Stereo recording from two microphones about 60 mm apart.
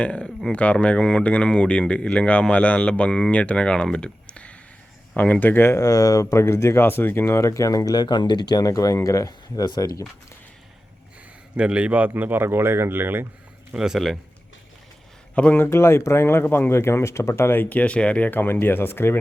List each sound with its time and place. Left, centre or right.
0.0 s speech: centre
3.9 s a sound: centre
5.1 s speech: left
5.8 s speech: left
6.3 s speech: left
7.3 s speech: left
11.5 s a man's voice: centre; by 13.2 s right
13.7 s speech: centre
15.5 s speech: left; by 18.3 s centre
18.3 s speech: left